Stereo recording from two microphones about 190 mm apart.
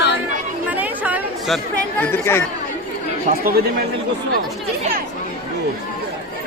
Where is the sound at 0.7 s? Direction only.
10° right (ahead or behind).